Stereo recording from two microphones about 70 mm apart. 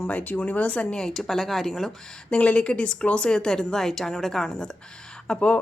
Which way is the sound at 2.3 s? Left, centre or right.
Centre.